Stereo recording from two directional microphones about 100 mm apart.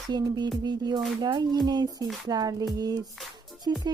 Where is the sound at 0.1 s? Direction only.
45° right (ahead or behind).